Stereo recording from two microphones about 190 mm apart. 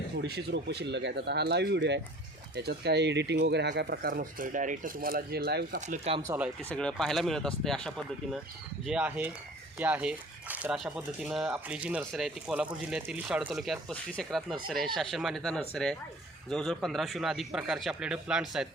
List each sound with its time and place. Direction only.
0.2 s speech: 60° right (ahead or behind)
5.8 s speech: 40° right (ahead or behind)
6.7 s speech: 5° left (ahead or behind)